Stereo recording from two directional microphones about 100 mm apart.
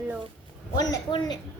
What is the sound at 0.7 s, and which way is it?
Speech, 40° left (ahead or behind).